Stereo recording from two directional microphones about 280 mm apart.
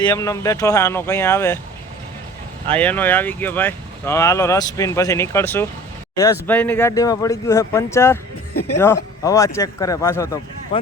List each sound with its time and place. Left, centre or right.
0.0 s speech: centre
2.7 s speech: centre
8.5 s speech: left
9.2 s speech: centre